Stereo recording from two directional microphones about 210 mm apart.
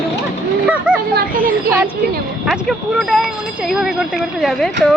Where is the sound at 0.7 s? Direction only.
5° right (ahead or behind).